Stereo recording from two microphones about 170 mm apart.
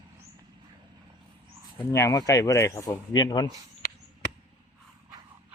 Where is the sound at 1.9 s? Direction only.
20° left (ahead or behind).